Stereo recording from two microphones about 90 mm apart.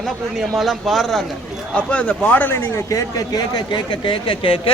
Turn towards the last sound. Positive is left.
turn(degrees=75)  # may be behind; listen again after turning